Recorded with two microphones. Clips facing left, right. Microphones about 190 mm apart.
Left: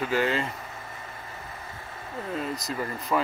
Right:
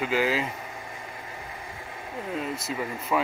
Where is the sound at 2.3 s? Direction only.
5° right (ahead or behind).